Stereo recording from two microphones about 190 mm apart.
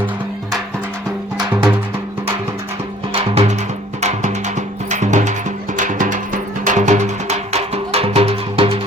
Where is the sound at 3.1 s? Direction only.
30° right (ahead or behind).